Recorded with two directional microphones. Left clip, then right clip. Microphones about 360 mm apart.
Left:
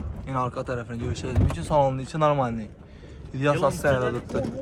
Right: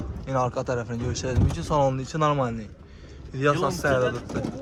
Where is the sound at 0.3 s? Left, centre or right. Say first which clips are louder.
Right 3 dB; centre.